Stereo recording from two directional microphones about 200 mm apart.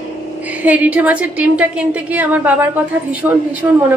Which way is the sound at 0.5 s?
10° right (ahead or behind).